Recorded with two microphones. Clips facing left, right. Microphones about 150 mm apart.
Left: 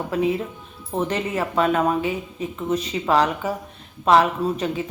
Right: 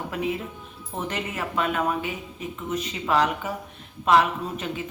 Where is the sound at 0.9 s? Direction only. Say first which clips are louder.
Left 7 dB; 35° left (ahead or behind).